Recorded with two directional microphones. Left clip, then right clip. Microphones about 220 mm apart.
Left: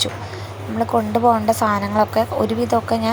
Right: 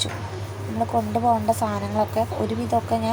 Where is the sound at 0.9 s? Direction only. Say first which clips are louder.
Left 5 dB; 30° left (ahead or behind).